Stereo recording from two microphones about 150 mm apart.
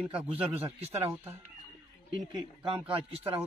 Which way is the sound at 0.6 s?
45° right (ahead or behind).